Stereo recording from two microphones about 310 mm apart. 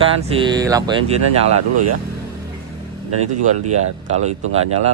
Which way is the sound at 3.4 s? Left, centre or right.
Right.